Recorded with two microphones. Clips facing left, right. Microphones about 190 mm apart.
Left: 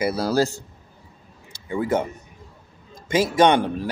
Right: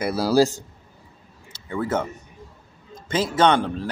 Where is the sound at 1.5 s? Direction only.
15° left (ahead or behind).